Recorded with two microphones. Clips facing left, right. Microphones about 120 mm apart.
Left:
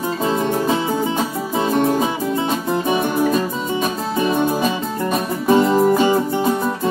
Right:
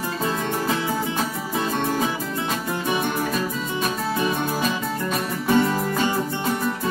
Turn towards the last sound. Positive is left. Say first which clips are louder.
# left 5 dB
turn(degrees=20)  # may be behind; listen again after turning